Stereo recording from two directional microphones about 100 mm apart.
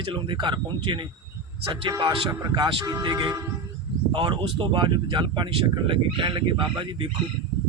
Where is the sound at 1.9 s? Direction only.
40° right (ahead or behind).